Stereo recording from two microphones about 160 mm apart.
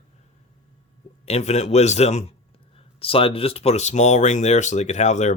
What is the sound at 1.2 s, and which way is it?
Speech, 45° left (ahead or behind).